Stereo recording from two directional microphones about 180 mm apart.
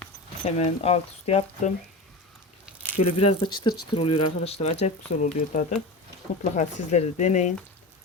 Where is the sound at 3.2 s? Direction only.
25° left (ahead or behind).